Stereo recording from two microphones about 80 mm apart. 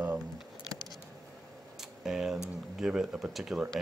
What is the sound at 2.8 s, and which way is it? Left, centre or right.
Speech, centre.